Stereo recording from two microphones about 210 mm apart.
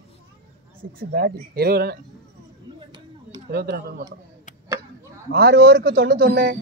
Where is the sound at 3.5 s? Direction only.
50° right (ahead or behind).